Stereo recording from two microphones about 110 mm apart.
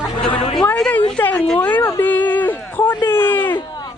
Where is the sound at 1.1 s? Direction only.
15° left (ahead or behind).